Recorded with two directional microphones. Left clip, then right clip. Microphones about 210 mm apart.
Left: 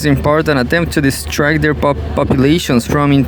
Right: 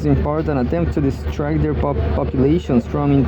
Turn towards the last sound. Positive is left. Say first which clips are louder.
# left 5 dB
turn(degrees=35)  # may be behind; listen again after turning